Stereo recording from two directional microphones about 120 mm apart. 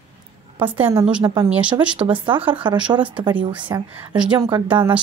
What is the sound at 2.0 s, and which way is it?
Speech, 45° right (ahead or behind).